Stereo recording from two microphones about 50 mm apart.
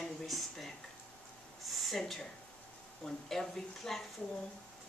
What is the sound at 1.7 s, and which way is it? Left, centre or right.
Speech, centre.